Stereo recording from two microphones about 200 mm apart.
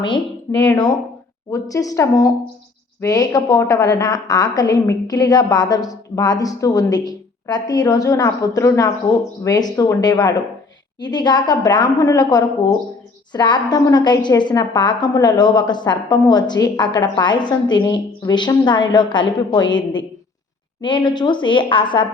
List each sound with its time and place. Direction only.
0.5 s a woman's voice: 5° left (ahead or behind); by 19.6 s 25° left (ahead or behind)
20.8 s a woman's voice: 20° left (ahead or behind)